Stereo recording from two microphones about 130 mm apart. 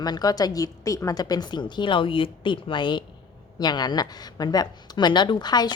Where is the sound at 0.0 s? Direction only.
30° left (ahead or behind).